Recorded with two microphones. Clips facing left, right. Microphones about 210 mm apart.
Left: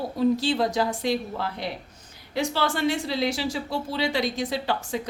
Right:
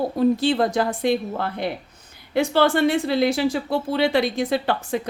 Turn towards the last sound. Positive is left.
turn(degrees=-55)  # may be behind; listen again after turning